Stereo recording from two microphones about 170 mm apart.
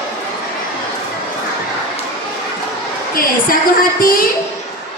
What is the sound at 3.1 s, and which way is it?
A woman's voice, 55° left (ahead or behind).